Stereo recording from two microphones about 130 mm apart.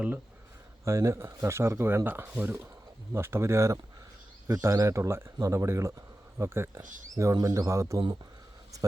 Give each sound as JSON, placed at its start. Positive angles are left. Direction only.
{"t": 0.9, "sound": "speech", "side_deg": -25}
{"t": 6.8, "sound": "speech", "side_deg": -80}
{"t": 7.2, "sound": "speech", "side_deg": -25}